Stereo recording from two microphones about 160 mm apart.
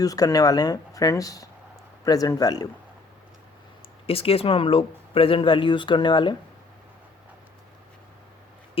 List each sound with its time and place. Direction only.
0.0 s speech: 20° left (ahead or behind)
4.0 s speech: 35° left (ahead or behind)